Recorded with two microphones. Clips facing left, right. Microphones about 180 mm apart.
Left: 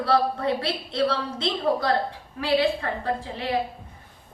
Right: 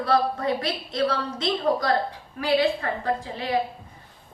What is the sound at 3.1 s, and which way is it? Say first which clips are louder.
Speech: even; 30° left (ahead or behind).